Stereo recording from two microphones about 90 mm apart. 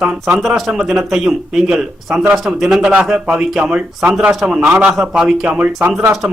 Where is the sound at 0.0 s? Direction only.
5° right (ahead or behind).